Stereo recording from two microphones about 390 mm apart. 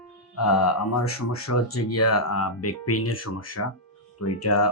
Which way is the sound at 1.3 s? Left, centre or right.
Left.